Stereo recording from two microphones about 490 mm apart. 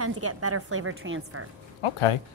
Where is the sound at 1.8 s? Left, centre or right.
Left.